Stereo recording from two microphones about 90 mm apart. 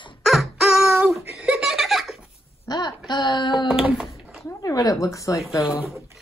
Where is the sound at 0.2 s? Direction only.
Centre (ahead or behind).